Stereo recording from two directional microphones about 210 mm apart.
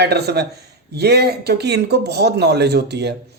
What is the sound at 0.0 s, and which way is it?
Speech, 50° right (ahead or behind).